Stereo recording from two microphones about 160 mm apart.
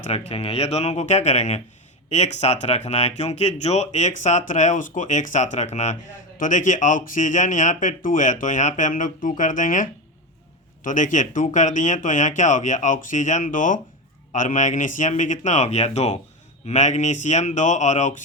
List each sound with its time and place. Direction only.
0.0 s speech: 40° left (ahead or behind)